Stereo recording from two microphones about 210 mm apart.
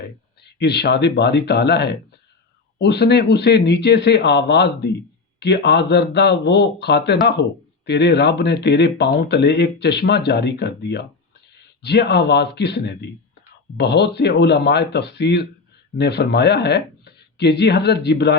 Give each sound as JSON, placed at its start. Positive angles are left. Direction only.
{"t": 0.0, "sound": "speech", "side_deg": 50}